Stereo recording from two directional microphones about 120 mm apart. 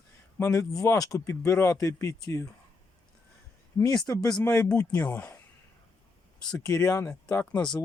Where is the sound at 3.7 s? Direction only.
30° left (ahead or behind).